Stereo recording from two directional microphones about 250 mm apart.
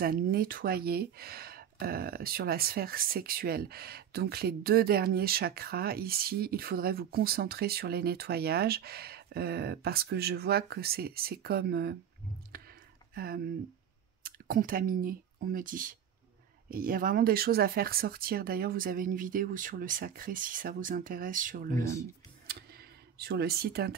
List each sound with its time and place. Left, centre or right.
0.0 s speech: right
12.5 s a sound: right
13.1 s speech: right
22.5 s computer keyboard: right